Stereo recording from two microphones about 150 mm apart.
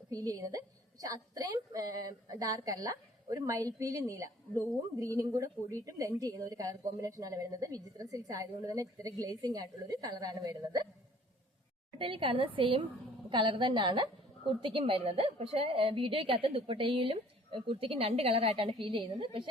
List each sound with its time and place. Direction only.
0.1 s a woman's voice: 25° right (ahead or behind)
11.9 s a woman's voice: 35° right (ahead or behind)